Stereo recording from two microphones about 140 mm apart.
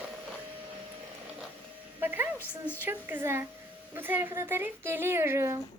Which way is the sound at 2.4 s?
15° left (ahead or behind).